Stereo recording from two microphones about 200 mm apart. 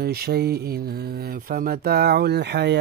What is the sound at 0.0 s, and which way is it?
Speech, 50° right (ahead or behind).